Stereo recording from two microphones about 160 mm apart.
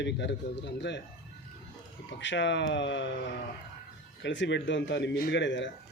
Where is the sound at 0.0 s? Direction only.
90° left.